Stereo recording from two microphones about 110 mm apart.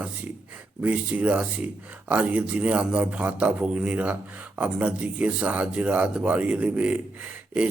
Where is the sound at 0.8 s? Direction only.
10° right (ahead or behind).